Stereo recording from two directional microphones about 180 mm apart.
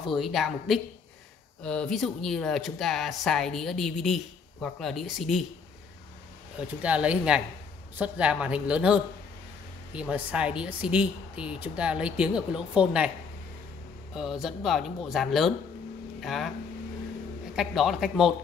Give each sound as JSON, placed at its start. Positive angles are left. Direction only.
{"t": 0.1, "sound": "speech", "side_deg": 0}
{"t": 6.8, "sound": "speech", "side_deg": -5}
{"t": 14.1, "sound": "speech", "side_deg": -5}
{"t": 17.6, "sound": "speech", "side_deg": 0}